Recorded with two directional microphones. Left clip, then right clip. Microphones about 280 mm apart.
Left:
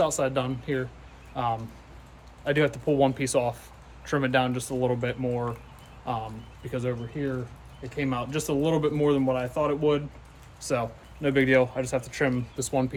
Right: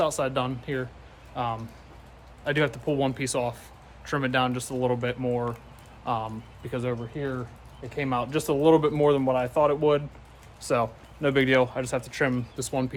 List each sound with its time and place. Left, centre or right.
0.0 s a man's voice: centre